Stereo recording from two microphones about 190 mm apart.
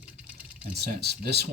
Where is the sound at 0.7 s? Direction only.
60° right (ahead or behind).